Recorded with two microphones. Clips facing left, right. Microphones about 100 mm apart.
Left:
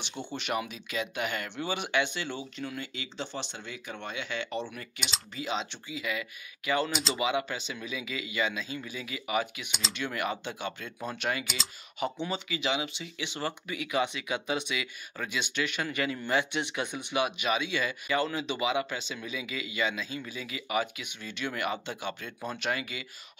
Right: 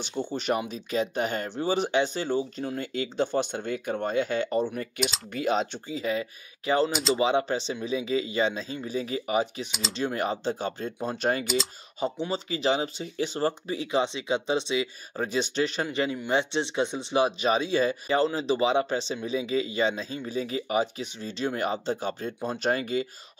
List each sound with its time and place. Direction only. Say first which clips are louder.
0.2 s speech: right 8 dB; 15° right (ahead or behind)
0.6 s speech: right 5 dB; 35° right (ahead or behind)
6.9 s speech: right 6 dB; centre (ahead or behind)
7.2 s speech: right 5 dB; 35° right (ahead or behind)
9.7 s speech: right 3 dB; centre (ahead or behind)
9.9 s speech: right 5 dB; 35° right (ahead or behind)
11.4 s speech: right 11 dB; centre (ahead or behind)
12.0 s speech: right 3 dB; 35° right (ahead or behind)